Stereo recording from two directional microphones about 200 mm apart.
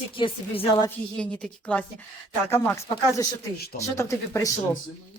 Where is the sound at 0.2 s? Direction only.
25° left (ahead or behind).